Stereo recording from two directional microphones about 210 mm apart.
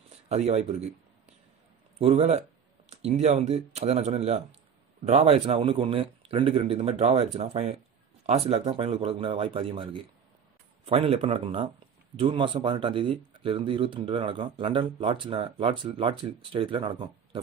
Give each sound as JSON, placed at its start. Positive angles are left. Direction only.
{"t": 0.3, "sound": "a man's voice", "side_deg": -30}